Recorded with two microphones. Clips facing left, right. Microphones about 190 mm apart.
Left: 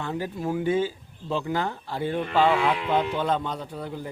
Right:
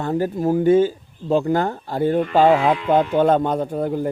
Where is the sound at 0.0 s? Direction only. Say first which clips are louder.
Right 9 dB; 45° right (ahead or behind).